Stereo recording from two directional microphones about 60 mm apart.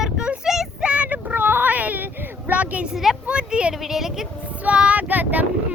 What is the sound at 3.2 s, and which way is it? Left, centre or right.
Speech, centre.